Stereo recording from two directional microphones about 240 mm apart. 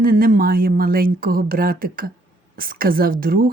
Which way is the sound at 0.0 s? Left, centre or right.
Right.